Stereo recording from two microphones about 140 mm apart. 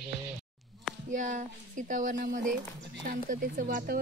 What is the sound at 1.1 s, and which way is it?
Speech, 65° right (ahead or behind).